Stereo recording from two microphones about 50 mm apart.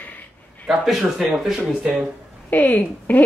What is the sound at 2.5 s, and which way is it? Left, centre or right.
Speech, left.